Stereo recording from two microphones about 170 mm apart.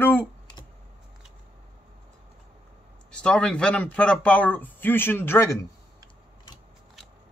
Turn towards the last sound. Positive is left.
turn(degrees=15)  # may be behind; listen again after turning